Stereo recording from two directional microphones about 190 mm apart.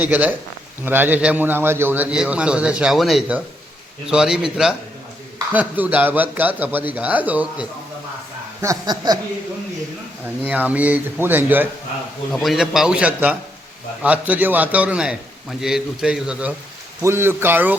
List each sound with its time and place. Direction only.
0.0 s a man's voice: 10° right (ahead or behind)
8.6 s speech: 20° right (ahead or behind)
10.2 s a man's voice: 10° right (ahead or behind)